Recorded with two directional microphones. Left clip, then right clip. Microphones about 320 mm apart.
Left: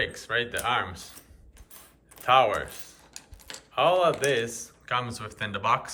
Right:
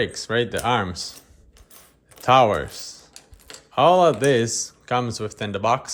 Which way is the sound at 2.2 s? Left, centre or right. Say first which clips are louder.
Right 5 dB; centre.